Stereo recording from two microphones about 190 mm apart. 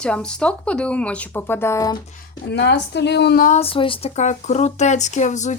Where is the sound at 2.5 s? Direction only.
65° left (ahead or behind).